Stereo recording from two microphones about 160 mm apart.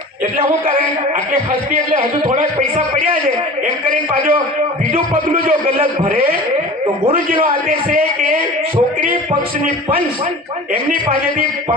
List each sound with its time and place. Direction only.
2.2 s a man's voice: 55° right (ahead or behind)
3.8 s a man's voice: 60° right (ahead or behind)
7.1 s a man's voice: 60° right (ahead or behind)